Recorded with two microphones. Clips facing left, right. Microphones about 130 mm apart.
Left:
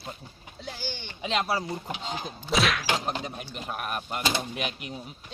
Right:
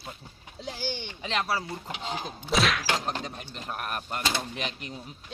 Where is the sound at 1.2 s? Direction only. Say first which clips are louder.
Left 3 dB; 15° left (ahead or behind).